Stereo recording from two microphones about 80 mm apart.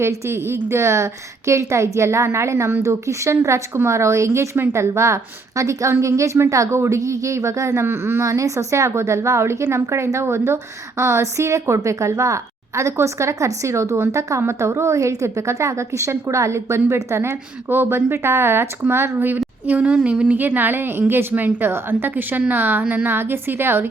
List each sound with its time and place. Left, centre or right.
0.0 s a woman's voice: right
19.6 s a woman's voice: centre
23.0 s a woman's voice: right